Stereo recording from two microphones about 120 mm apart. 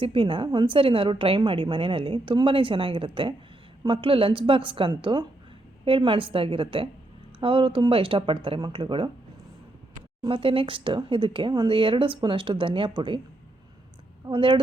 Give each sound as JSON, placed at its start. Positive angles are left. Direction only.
{"t": 0.0, "sound": "a woman's voice", "side_deg": -50}
{"t": 10.2, "sound": "a woman's voice", "side_deg": -50}
{"t": 14.3, "sound": "a woman's voice", "side_deg": -45}